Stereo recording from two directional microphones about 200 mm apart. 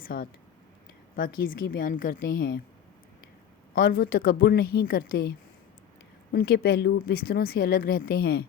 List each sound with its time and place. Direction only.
0.0 s speech: 45° left (ahead or behind)
3.8 s speech: 50° left (ahead or behind)
6.3 s speech: 50° left (ahead or behind)